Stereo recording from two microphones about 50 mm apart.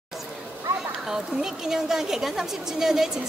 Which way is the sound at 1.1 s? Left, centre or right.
Centre.